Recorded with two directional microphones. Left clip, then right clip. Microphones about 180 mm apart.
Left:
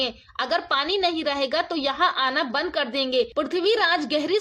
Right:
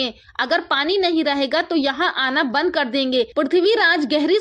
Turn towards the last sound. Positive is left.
turn(degrees=-20)  # may be behind; listen again after turning